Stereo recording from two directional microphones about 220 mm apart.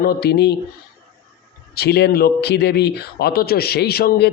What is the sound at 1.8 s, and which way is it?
A man's voice, 45° left (ahead or behind).